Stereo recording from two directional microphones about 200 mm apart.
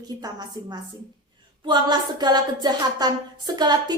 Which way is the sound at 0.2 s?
20° right (ahead or behind).